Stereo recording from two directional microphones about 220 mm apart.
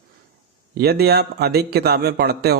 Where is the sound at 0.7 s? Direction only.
45° right (ahead or behind).